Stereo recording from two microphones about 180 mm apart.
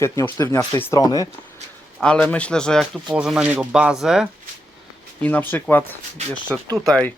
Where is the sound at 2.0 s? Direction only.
5° left (ahead or behind).